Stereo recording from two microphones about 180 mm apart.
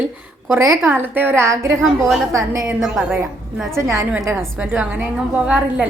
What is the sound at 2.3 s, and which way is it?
Speech, 15° right (ahead or behind).